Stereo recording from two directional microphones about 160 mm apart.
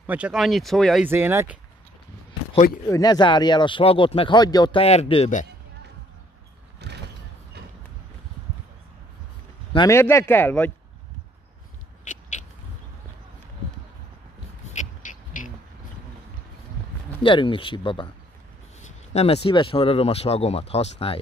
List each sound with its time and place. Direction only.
0.0 s speech: 10° right (ahead or behind)
1.0 s speech: 15° right (ahead or behind)
2.9 s speech: 25° left (ahead or behind)
6.8 s vehicle: 90° right
9.8 s speech: 15° left (ahead or behind)
12.0 s biting: 50° left (ahead or behind)
14.7 s a sound: 50° left (ahead or behind)
17.2 s speech: 30° left (ahead or behind)
18.8 s speech: 40° left (ahead or behind)